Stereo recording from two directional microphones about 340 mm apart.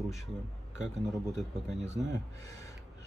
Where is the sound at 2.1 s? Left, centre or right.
Centre.